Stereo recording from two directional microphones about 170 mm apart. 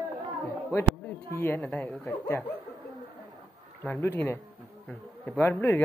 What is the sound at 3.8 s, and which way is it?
Speech, 10° left (ahead or behind).